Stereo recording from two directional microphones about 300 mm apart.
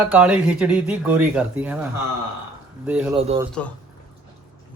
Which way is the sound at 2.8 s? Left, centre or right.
Centre.